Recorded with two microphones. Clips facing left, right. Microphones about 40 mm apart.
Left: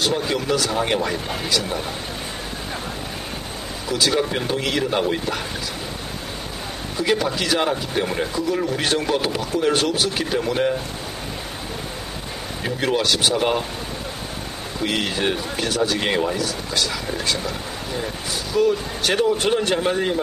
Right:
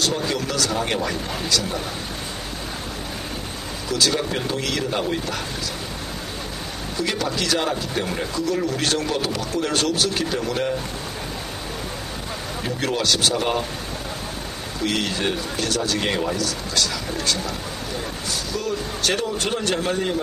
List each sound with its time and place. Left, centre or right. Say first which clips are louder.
0.0 s speech: left 2 dB; centre
3.9 s speech: left 2 dB; centre
7.0 s speech: left 3 dB; centre
12.6 s speech: left 2 dB; centre
14.8 s speech: left 1 dB; centre
18.5 s speech: left 10 dB; left